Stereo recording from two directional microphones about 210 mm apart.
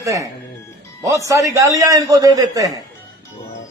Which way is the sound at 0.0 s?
15° right (ahead or behind).